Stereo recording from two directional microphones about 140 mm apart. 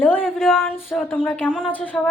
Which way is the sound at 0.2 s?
Centre (ahead or behind).